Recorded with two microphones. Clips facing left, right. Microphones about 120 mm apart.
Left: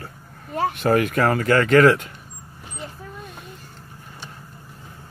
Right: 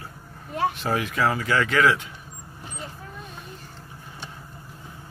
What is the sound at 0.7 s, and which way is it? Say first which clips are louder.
Speech: left 6 dB; 55° left (ahead or behind).